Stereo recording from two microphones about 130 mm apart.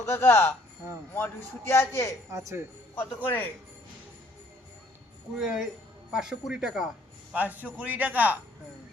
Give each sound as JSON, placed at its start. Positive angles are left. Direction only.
{"t": 0.0, "sound": "a man's voice", "side_deg": 15}
{"t": 2.3, "sound": "speech", "side_deg": -20}
{"t": 2.9, "sound": "a man's voice", "side_deg": 15}
{"t": 5.4, "sound": "a man's voice", "side_deg": -5}